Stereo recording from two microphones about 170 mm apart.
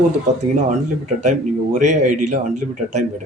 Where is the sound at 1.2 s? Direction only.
45° right (ahead or behind).